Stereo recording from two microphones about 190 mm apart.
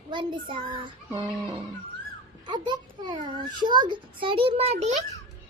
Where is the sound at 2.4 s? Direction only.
25° right (ahead or behind).